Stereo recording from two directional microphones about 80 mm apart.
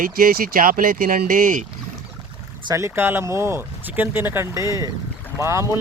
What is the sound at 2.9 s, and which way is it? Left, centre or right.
Speech, right.